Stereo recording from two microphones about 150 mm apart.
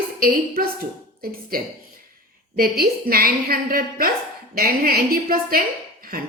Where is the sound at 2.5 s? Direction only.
90° right.